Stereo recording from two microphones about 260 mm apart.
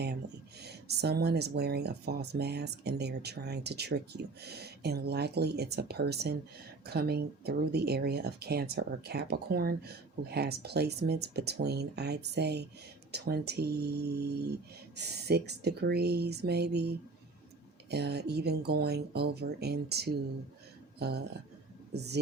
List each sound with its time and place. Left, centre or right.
0.6 s speech: right
17.9 s speech: right